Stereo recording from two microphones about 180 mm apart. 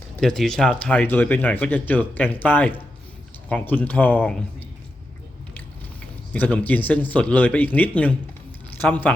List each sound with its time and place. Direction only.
0.2 s speech: centre (ahead or behind)
6.3 s speech: 5° left (ahead or behind)